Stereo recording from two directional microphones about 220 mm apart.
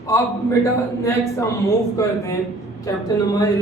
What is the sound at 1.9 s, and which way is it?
A man's voice, 15° left (ahead or behind).